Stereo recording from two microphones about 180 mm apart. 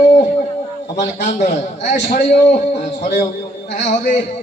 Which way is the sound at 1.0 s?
45° left (ahead or behind).